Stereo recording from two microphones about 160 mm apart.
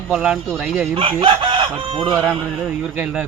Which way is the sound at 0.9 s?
35° right (ahead or behind).